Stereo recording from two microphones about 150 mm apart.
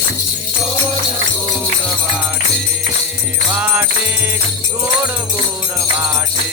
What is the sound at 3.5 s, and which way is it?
Music, 10° right (ahead or behind).